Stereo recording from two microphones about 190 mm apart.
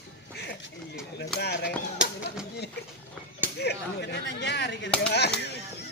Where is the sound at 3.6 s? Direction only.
60° left (ahead or behind).